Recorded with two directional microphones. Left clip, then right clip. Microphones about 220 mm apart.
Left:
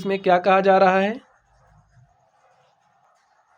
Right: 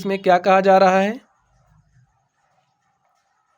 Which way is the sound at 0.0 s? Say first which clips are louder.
Right 2 dB; 20° right (ahead or behind).